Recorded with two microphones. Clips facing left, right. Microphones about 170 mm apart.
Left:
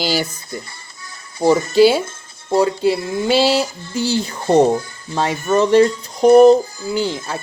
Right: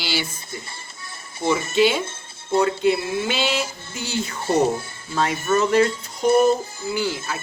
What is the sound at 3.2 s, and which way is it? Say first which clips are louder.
Speech: left 8 dB; 35° left (ahead or behind).